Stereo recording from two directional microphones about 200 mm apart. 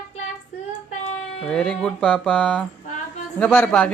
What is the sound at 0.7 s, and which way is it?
Child singing, 35° left (ahead or behind).